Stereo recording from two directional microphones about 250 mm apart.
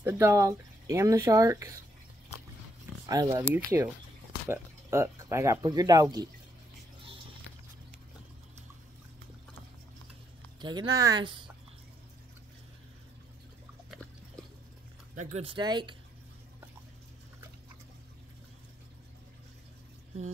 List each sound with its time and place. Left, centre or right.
0.0 s speech: centre
3.1 s speech: centre
10.6 s speech: centre
13.8 s a sound: centre
15.1 s speech: right